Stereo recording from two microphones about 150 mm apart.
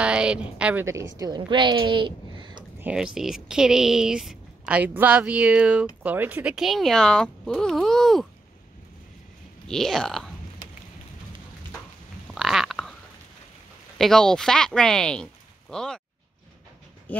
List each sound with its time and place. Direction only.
0.0 s a woman's voice: 5° right (ahead or behind)
0.8 s a woman's voice: 20° right (ahead or behind)
2.8 s speech: 5° right (ahead or behind)
9.7 s speech: centre (ahead or behind)
12.4 s a sound: 5° right (ahead or behind)
13.9 s speech: centre (ahead or behind)
17.1 s a sound: 10° left (ahead or behind)